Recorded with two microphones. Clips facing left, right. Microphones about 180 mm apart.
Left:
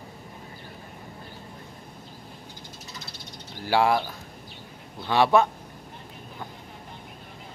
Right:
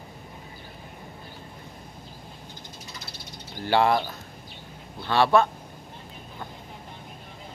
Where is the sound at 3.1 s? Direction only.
5° left (ahead or behind).